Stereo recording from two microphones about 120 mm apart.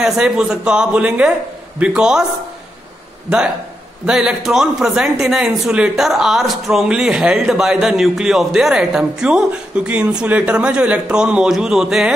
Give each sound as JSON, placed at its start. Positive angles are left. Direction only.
{"t": 0.0, "sound": "a man's voice", "side_deg": -5}
{"t": 3.3, "sound": "a man's voice", "side_deg": -5}